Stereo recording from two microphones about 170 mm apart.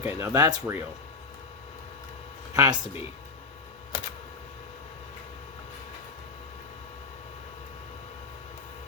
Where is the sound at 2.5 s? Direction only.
20° right (ahead or behind).